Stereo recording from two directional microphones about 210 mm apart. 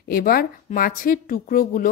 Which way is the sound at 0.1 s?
45° left (ahead or behind).